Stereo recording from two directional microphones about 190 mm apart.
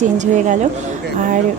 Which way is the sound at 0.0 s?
40° right (ahead or behind).